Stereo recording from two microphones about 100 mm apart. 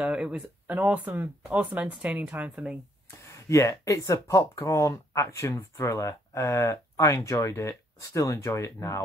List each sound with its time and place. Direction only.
0.0 s speech: 10° right (ahead or behind)
3.3 s speech: 30° left (ahead or behind)